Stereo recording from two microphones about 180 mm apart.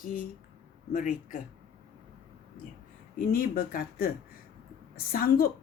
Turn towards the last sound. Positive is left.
turn(degrees=55)  # may be behind; listen again after turning